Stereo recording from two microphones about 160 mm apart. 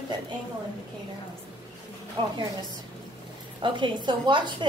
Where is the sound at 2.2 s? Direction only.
30° right (ahead or behind).